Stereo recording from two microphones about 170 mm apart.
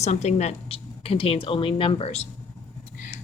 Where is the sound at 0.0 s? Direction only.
40° left (ahead or behind).